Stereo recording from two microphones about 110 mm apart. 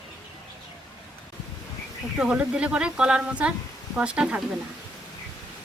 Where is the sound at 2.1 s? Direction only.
5° right (ahead or behind).